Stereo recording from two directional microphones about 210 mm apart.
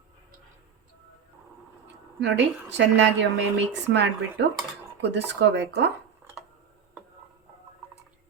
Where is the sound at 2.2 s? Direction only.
55° right (ahead or behind).